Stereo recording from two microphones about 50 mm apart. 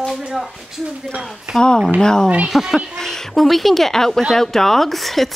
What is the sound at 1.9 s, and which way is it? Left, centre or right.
Speech, centre.